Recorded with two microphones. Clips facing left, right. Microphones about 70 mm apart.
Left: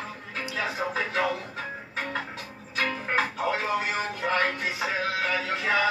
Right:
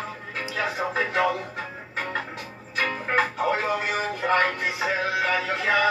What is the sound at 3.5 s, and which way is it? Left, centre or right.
Music, right.